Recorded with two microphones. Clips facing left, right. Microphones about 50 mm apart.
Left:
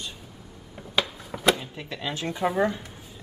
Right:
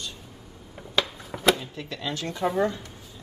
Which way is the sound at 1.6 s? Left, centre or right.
Centre.